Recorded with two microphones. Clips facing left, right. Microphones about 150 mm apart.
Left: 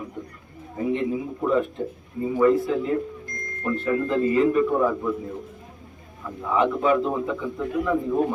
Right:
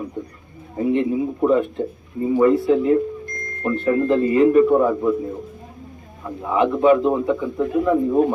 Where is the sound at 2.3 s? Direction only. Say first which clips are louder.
Right 4 dB; 25° right (ahead or behind).